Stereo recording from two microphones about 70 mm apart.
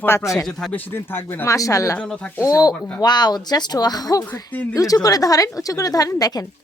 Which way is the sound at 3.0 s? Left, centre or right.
Left.